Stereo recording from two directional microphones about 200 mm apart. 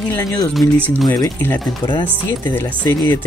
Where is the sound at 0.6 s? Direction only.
5° left (ahead or behind).